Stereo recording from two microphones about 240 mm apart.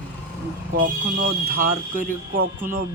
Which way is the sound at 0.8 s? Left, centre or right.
Right.